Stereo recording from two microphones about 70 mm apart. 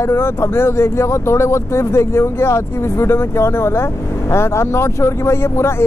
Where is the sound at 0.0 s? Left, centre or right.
Left.